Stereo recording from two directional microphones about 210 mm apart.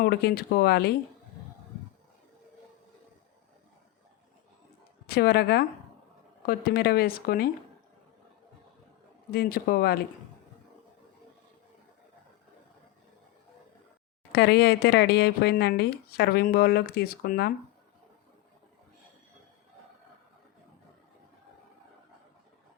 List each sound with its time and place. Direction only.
0.0 s a woman's voice: 50° left (ahead or behind)
5.0 s a woman's voice: 50° left (ahead or behind)
9.3 s a woman's voice: 45° left (ahead or behind)
14.3 s a woman's voice: 50° left (ahead or behind)